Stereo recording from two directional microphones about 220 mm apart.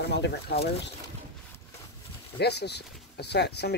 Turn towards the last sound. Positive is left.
turn(degrees=50)  # may be behind; listen again after turning